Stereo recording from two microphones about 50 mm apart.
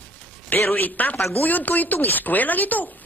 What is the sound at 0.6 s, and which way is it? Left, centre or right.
Speech, left.